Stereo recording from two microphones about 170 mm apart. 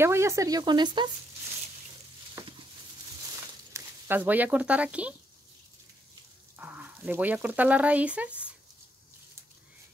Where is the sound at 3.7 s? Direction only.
15° right (ahead or behind).